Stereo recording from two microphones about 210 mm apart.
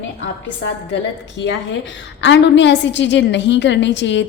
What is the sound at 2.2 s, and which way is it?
A woman's voice, 60° left (ahead or behind).